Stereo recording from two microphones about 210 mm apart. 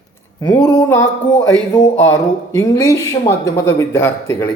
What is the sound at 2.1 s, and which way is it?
Speech, 15° left (ahead or behind).